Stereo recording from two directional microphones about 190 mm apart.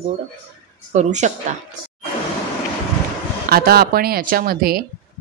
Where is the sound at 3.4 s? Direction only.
55° right (ahead or behind).